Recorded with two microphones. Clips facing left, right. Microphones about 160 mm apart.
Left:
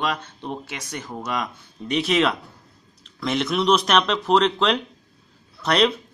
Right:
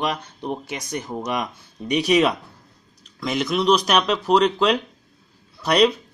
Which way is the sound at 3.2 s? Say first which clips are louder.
Even; centre (ahead or behind).